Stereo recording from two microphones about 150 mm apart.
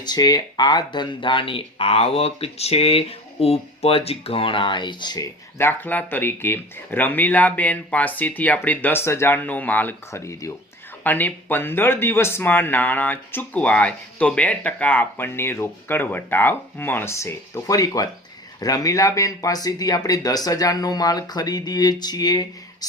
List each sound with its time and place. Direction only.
0.0 s speech: 25° left (ahead or behind)